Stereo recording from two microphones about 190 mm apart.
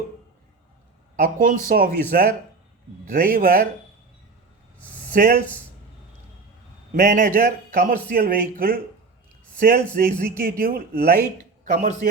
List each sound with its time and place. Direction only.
1.1 s speech: 45° right (ahead or behind)
5.1 s speech: 50° right (ahead or behind)
6.9 s speech: 50° right (ahead or behind)